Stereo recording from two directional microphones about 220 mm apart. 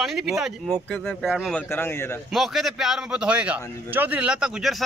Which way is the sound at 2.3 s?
Centre (ahead or behind).